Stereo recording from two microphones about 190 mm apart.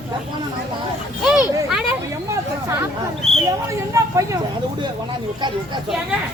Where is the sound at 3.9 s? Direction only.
15° right (ahead or behind).